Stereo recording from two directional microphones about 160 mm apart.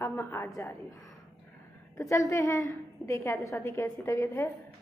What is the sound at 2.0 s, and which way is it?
A woman's voice, 20° left (ahead or behind).